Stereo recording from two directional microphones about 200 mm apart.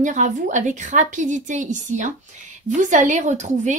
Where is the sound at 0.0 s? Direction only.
40° right (ahead or behind).